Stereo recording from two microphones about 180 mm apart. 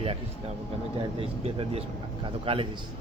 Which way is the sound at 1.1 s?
30° right (ahead or behind).